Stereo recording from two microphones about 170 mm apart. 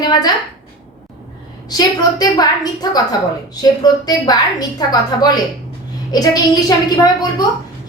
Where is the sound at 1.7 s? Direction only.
20° left (ahead or behind).